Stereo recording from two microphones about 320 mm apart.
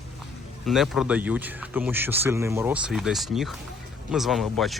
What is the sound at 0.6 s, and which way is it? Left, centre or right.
Speech, centre.